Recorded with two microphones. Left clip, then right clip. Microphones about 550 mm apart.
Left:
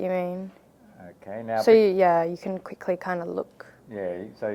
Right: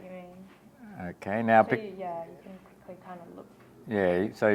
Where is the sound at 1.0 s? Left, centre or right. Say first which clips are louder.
Right 5 dB; right.